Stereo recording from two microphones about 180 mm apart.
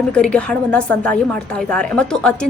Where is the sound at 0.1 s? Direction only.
5° left (ahead or behind).